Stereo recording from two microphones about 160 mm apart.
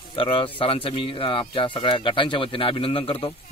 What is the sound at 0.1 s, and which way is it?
Speech, 35° left (ahead or behind).